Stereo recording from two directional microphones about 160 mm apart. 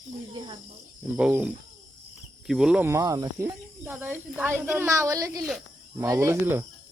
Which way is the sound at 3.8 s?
15° right (ahead or behind).